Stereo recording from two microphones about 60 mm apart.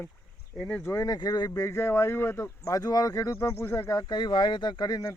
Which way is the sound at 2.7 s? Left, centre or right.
Left.